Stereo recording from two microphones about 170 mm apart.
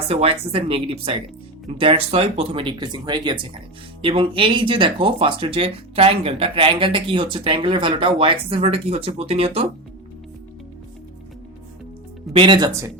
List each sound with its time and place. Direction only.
0.1 s speech: 35° right (ahead or behind)
12.3 s speech: 30° right (ahead or behind)